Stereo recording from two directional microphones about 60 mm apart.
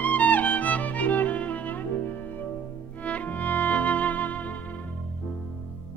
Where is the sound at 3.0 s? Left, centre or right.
Left.